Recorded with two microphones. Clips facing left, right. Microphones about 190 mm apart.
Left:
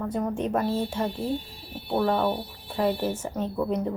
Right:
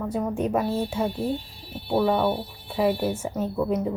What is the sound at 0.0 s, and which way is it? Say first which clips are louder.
A woman's voice: right 2 dB; centre (ahead or behind).